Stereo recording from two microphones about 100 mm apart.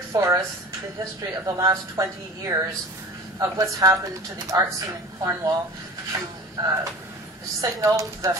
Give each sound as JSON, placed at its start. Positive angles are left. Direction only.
{"t": 0.1, "sound": "a woman's voice", "side_deg": -30}